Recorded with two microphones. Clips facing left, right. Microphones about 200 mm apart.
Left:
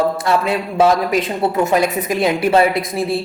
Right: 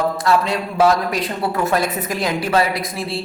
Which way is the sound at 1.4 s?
20° left (ahead or behind).